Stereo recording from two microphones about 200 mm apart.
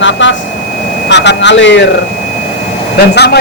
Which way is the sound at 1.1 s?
60° left (ahead or behind).